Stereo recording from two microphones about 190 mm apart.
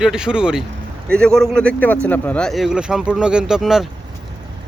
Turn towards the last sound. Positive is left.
turn(degrees=0)  # may be behind; listen again after turning